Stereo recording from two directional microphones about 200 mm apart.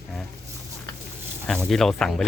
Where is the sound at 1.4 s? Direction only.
Centre (ahead or behind).